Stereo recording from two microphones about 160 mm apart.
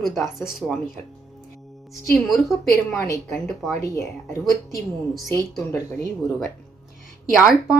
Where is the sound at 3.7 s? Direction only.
20° left (ahead or behind).